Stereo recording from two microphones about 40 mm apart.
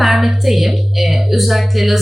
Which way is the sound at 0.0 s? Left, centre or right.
Centre.